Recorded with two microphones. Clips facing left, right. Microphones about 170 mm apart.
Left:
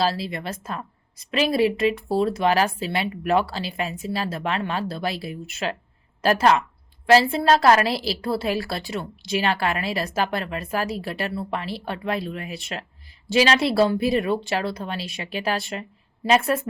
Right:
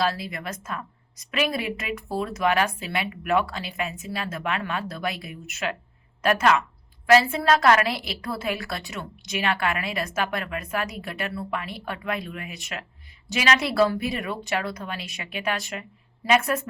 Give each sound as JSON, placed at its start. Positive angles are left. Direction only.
{"t": 0.0, "sound": "a woman's voice", "side_deg": 30}